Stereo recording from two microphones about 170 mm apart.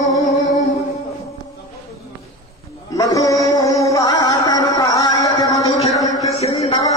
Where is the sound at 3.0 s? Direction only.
20° left (ahead or behind).